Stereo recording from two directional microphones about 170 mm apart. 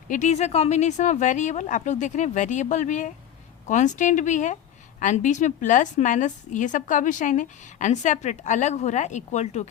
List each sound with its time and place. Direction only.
0.1 s a woman's voice: 45° left (ahead or behind)